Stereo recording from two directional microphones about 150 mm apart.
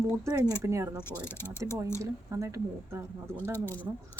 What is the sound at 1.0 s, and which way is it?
Speech, 15° left (ahead or behind).